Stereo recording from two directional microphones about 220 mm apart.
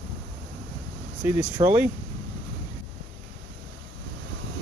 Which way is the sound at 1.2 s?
10° right (ahead or behind).